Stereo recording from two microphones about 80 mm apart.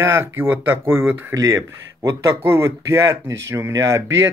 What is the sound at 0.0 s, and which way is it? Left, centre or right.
Speech, right.